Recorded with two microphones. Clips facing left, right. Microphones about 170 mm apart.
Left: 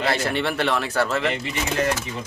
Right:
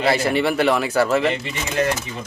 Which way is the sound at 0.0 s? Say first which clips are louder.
Right 4 dB; 10° right (ahead or behind).